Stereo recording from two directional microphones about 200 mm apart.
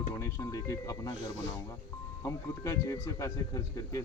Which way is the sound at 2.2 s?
15° left (ahead or behind).